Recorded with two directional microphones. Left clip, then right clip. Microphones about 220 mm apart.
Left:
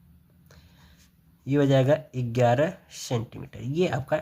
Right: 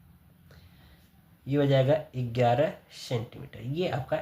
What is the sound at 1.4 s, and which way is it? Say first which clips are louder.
Speech: left 3 dB; 35° left (ahead or behind).